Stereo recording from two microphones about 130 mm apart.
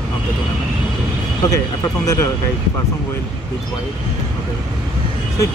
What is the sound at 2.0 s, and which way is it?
Speech, 25° left (ahead or behind).